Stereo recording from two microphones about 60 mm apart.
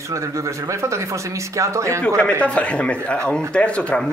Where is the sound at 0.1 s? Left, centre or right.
Right.